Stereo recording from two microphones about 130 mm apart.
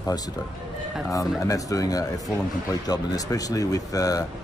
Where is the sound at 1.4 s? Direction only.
25° left (ahead or behind).